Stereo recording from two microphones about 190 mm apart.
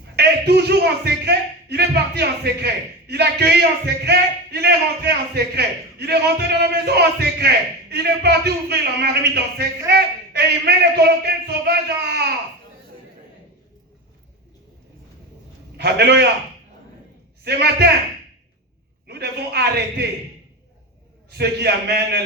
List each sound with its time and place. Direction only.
0.2 s speech: 60° right (ahead or behind)
15.8 s speech: 60° right (ahead or behind)
17.4 s speech: 60° right (ahead or behind)
19.0 s speech: 60° right (ahead or behind)
21.2 s speech: 60° right (ahead or behind)